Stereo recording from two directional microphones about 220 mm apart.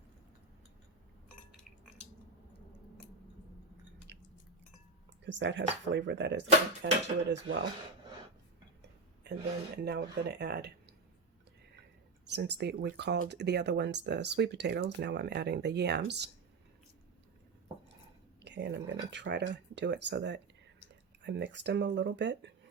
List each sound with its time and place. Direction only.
4.1 s chewing: 50° right (ahead or behind)
5.2 s speech: 55° right (ahead or behind)
9.2 s a sound: 50° right (ahead or behind)
9.7 s speech: 50° right (ahead or behind)
12.3 s speech: 50° right (ahead or behind)
18.4 s speech: 50° right (ahead or behind)